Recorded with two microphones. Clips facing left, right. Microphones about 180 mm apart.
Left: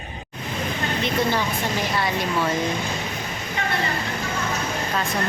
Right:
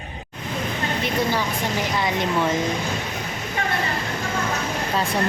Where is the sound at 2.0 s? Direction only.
20° right (ahead or behind).